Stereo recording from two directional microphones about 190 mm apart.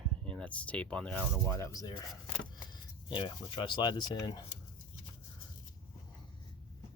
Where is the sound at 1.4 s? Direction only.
15° left (ahead or behind).